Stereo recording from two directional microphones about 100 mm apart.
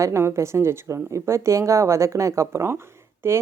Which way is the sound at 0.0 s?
30° right (ahead or behind).